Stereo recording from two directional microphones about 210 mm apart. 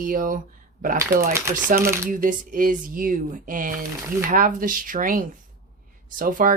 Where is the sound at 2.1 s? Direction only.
40° right (ahead or behind).